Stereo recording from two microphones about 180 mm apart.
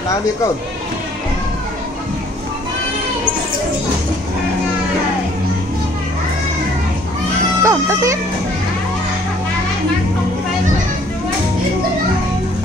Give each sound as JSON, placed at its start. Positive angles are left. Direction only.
{"t": 7.6, "sound": "speech", "side_deg": -15}